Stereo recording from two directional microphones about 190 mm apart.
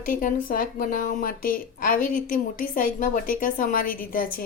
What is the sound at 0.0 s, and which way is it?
A woman's voice, 45° left (ahead or behind).